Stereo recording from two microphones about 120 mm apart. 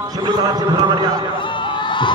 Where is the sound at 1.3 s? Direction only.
40° left (ahead or behind).